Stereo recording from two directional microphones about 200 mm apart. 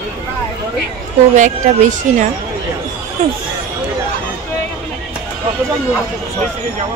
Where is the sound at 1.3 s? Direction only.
40° right (ahead or behind).